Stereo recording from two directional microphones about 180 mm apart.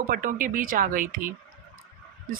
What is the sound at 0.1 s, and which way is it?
Speech, 50° right (ahead or behind).